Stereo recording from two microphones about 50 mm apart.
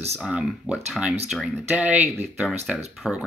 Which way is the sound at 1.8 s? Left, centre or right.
Right.